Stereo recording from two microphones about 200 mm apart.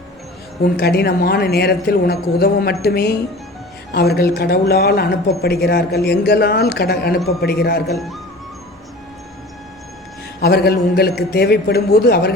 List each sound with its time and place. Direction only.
0.6 s speech: 50° left (ahead or behind)
7.9 s speech: centre (ahead or behind)
10.4 s speech: 50° left (ahead or behind)